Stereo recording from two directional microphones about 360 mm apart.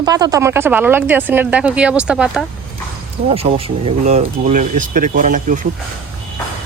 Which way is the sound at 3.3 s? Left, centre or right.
Centre.